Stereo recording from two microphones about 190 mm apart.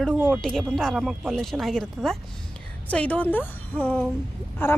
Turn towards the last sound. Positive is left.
turn(degrees=10)  # may be behind; listen again after turning